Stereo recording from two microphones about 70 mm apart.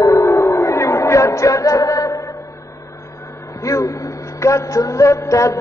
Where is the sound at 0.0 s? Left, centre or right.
Left.